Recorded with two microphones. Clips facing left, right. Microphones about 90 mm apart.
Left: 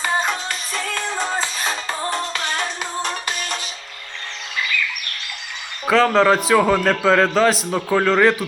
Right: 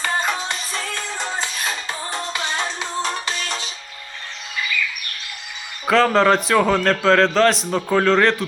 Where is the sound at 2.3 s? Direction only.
20° right (ahead or behind).